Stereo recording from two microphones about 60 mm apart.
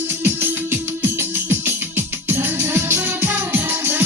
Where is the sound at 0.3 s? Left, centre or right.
Right.